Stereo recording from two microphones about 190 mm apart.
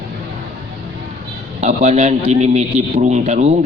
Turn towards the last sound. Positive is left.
turn(degrees=-40)  # may be behind; listen again after turning